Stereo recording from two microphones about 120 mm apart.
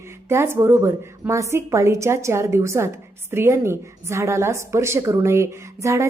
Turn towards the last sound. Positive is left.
turn(degrees=-25)  # may be behind; listen again after turning